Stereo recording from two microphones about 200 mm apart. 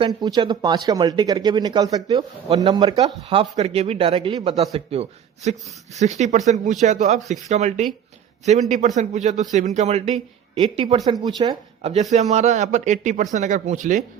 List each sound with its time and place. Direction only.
0.0 s a man's voice: 20° right (ahead or behind); by 14.0 s 40° right (ahead or behind)